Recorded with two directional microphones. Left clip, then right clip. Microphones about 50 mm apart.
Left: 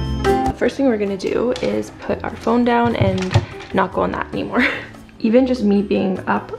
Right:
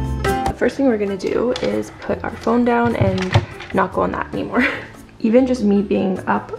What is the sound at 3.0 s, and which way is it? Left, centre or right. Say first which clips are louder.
Speech: right 1 dB; right.